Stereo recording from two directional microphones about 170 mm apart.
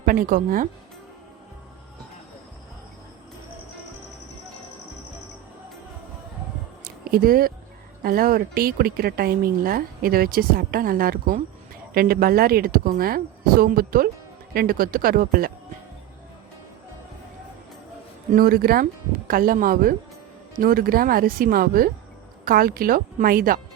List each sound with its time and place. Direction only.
0.0 s speech: 55° right (ahead or behind)
6.8 s a sound: 60° right (ahead or behind)
8.0 s speech: 60° right (ahead or behind)
18.3 s speech: 60° right (ahead or behind)